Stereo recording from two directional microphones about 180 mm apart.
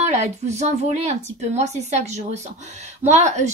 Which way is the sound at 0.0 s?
40° right (ahead or behind).